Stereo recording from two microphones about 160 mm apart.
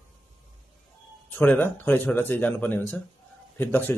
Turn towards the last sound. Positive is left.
turn(degrees=15)  # may be behind; listen again after turning